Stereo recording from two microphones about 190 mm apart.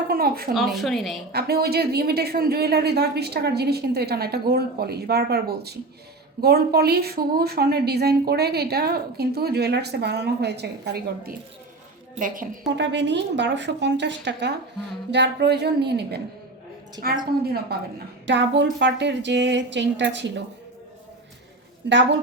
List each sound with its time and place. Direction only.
0.1 s speech: 50° right (ahead or behind)
0.5 s a woman's voice: centre (ahead or behind)
1.3 s a woman's voice: 55° right (ahead or behind)
12.6 s a woman's voice: 65° right (ahead or behind)
17.0 s a woman's voice: 20° right (ahead or behind)
17.4 s a woman's voice: 55° right (ahead or behind)
18.3 s a woman's voice: 70° right (ahead or behind)
21.8 s a woman's voice: 70° right (ahead or behind)